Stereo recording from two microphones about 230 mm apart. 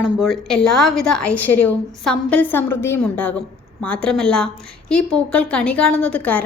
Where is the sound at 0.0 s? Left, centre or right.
Centre.